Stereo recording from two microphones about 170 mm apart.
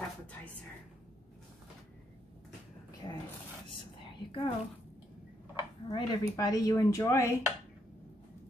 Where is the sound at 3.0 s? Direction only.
20° left (ahead or behind).